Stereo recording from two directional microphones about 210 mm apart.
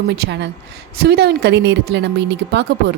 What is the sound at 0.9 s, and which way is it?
A woman's voice, 50° right (ahead or behind).